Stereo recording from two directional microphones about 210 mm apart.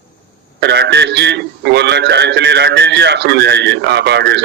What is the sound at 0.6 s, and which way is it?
A man's voice, 55° right (ahead or behind).